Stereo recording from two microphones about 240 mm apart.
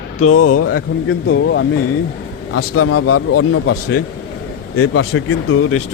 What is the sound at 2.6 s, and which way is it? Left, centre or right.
Speech, left.